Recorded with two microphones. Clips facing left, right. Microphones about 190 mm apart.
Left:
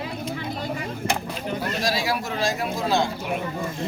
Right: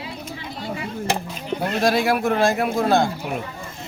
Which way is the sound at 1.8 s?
55° right (ahead or behind).